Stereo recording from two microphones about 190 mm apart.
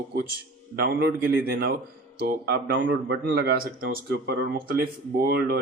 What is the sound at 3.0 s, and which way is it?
Speech, 60° right (ahead or behind).